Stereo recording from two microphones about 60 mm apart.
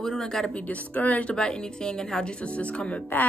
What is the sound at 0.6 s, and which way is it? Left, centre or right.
A woman's voice, left.